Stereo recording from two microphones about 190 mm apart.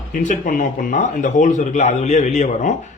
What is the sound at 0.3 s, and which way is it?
A man's voice, 45° left (ahead or behind).